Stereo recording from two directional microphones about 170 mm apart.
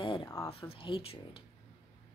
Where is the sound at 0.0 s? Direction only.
30° left (ahead or behind).